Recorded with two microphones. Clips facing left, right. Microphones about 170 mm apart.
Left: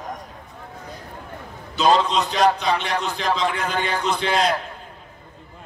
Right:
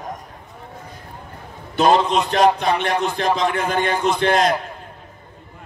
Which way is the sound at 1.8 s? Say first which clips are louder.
Right 2 dB; 55° right (ahead or behind).